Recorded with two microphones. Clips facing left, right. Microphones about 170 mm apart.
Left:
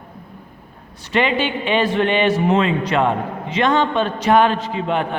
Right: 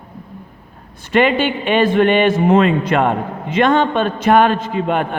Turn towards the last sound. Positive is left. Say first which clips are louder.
# right 3 dB
turn(degrees=-50)  # may be behind; listen again after turning